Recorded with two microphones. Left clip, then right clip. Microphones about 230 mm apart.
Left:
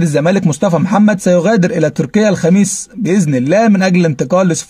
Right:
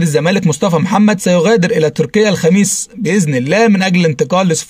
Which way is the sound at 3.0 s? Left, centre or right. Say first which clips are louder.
Left 1 dB; right.